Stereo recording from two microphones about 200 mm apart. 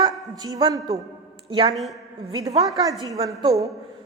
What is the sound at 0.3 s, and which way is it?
A woman's voice, 20° right (ahead or behind).